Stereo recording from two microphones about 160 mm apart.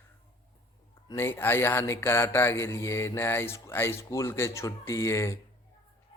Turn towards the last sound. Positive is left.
turn(degrees=20)  # may be behind; listen again after turning